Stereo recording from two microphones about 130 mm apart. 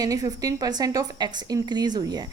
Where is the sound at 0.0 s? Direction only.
30° right (ahead or behind).